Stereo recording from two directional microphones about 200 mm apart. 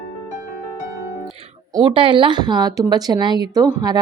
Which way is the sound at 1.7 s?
25° right (ahead or behind).